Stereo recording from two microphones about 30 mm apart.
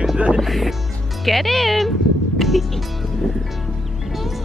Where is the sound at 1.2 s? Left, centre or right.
Centre.